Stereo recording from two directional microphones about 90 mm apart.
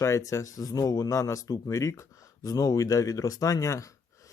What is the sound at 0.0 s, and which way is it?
A man's voice, 35° left (ahead or behind).